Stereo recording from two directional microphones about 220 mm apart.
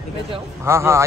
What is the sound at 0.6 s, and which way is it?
Speech, 10° right (ahead or behind).